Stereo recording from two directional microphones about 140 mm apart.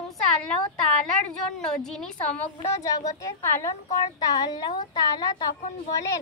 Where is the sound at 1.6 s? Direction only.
5° left (ahead or behind).